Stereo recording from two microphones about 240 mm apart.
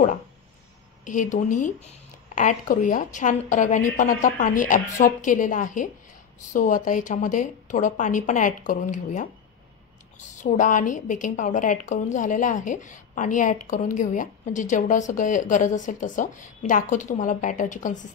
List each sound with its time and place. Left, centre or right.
1.0 s a woman's voice: left
10.3 s a woman's voice: left